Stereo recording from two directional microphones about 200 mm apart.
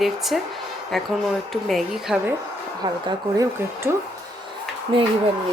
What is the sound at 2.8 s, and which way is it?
Speech, 20° right (ahead or behind).